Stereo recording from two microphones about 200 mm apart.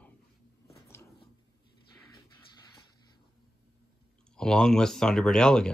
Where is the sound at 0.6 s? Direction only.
15° left (ahead or behind).